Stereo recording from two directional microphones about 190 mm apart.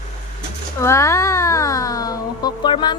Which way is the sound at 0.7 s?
15° left (ahead or behind).